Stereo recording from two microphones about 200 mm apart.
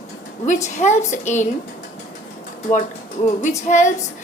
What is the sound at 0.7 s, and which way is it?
Speech, 35° left (ahead or behind).